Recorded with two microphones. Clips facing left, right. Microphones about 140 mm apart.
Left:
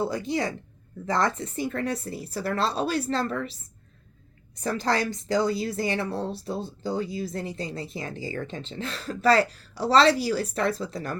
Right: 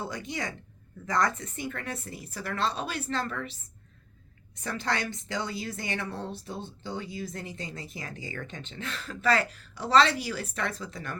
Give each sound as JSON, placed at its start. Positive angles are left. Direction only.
{"t": 0.0, "sound": "a woman's voice", "side_deg": 35}